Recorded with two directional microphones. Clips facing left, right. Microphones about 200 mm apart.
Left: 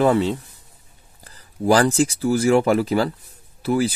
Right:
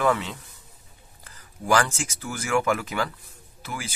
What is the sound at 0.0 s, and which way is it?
Speech, 30° left (ahead or behind).